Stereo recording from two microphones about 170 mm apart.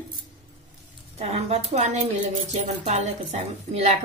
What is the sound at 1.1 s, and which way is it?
A woman's voice, 35° right (ahead or behind).